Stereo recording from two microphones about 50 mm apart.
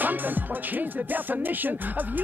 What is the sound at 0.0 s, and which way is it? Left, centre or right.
Music, right.